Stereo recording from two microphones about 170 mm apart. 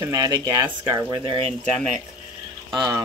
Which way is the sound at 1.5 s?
5° left (ahead or behind).